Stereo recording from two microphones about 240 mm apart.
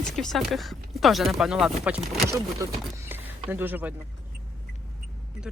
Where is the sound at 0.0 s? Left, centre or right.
Centre.